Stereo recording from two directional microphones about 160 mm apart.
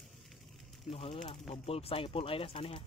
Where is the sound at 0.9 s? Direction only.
35° left (ahead or behind).